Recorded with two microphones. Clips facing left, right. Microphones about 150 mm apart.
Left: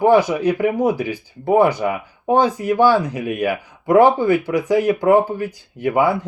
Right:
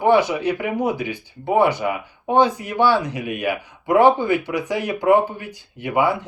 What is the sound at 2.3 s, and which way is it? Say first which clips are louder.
Speech: left 2 dB; 45° left (ahead or behind).